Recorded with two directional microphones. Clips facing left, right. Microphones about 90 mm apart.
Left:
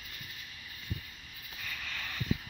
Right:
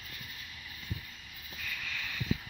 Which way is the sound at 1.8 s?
30° left (ahead or behind).